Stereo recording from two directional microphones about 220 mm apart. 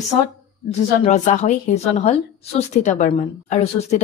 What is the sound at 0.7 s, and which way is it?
A woman's voice, 30° left (ahead or behind).